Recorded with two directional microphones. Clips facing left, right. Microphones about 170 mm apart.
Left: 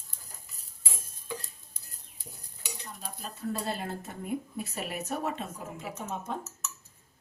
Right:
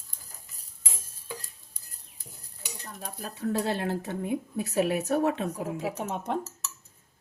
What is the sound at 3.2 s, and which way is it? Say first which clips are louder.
Speech: right 5 dB; 75° right (ahead or behind).